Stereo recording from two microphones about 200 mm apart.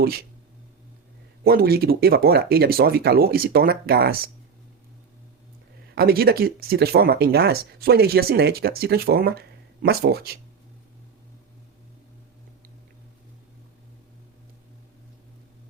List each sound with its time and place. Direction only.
0.0 s speech: 50° right (ahead or behind)
1.5 s speech: 50° right (ahead or behind)
5.9 s speech: 50° right (ahead or behind)